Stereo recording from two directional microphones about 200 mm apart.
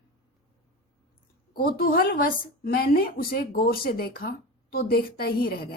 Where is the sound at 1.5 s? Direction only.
45° left (ahead or behind).